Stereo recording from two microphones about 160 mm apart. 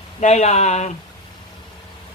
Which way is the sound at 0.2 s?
45° left (ahead or behind).